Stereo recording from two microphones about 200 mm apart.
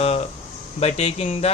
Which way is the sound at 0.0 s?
30° left (ahead or behind).